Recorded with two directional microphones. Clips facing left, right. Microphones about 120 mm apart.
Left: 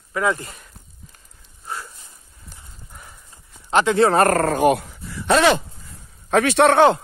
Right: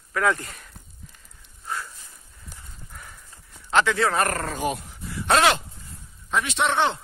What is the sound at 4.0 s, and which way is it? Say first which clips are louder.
Speech: left 8 dB; 40° left (ahead or behind).